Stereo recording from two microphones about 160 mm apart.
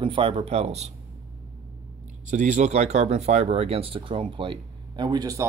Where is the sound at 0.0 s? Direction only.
30° right (ahead or behind).